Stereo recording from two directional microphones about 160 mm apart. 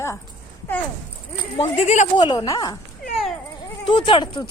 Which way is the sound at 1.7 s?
40° left (ahead or behind).